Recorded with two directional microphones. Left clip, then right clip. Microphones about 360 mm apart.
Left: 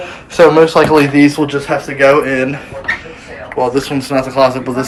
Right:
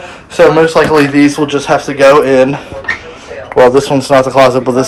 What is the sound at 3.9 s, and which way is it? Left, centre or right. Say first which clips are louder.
Speech: right 7 dB; centre.